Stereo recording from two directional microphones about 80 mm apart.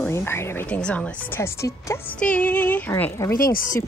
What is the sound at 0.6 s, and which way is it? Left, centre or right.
Speech, centre.